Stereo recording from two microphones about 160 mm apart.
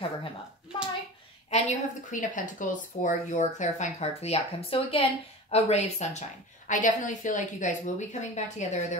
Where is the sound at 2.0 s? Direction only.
55° left (ahead or behind).